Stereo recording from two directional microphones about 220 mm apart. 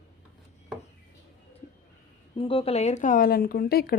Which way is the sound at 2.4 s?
25° left (ahead or behind).